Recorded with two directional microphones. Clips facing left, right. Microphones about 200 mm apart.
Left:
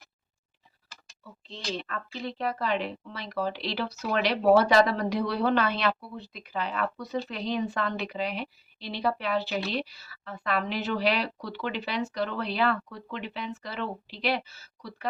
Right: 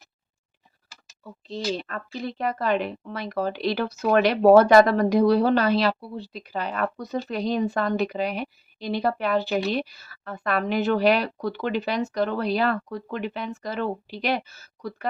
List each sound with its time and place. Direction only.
1.2 s a woman's voice: 40° right (ahead or behind)